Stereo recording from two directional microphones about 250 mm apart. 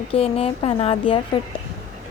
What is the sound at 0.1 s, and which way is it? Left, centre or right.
Speech, left.